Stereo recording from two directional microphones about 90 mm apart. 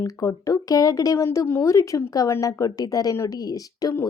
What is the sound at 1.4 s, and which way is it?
A woman's voice, 30° left (ahead or behind).